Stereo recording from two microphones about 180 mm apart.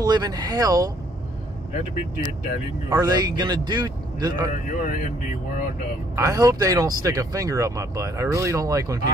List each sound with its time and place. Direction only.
0.0 s speech: 20° right (ahead or behind)
2.9 s speech: 20° right (ahead or behind)
4.5 s speech: 45° left (ahead or behind)
6.1 s speech: 20° right (ahead or behind)